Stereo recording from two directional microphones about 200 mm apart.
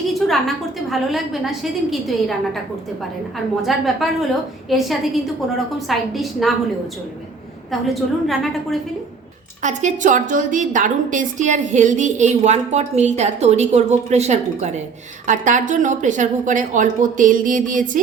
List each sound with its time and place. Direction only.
0.1 s a woman's voice: centre (ahead or behind)
8.3 s a woman's voice: centre (ahead or behind)
9.6 s a woman's voice: 40° right (ahead or behind)